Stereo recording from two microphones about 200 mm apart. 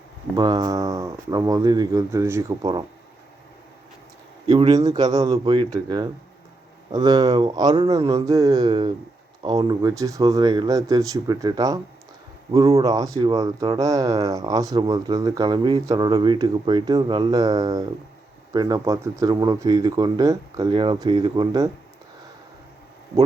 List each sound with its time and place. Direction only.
0.3 s speech: 20° right (ahead or behind)
4.4 s a man's voice: 30° right (ahead or behind)
4.7 s speech: 20° right (ahead or behind)